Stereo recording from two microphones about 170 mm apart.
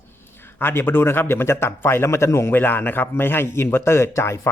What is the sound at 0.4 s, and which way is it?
A man's voice, 15° left (ahead or behind).